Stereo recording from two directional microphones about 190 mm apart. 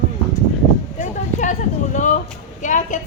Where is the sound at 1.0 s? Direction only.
40° left (ahead or behind).